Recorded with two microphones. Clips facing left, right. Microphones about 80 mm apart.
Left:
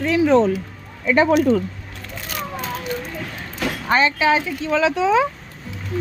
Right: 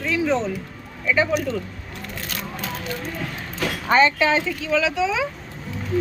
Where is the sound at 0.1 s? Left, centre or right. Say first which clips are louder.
Left 7 dB; left.